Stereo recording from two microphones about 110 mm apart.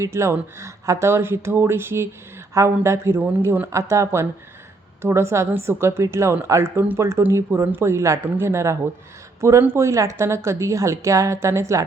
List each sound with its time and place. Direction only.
0.0 s speech: 25° right (ahead or behind)